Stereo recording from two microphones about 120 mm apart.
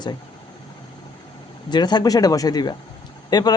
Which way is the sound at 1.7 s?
35° left (ahead or behind).